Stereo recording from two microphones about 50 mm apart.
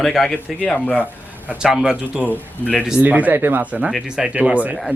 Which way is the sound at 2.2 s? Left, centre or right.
Left.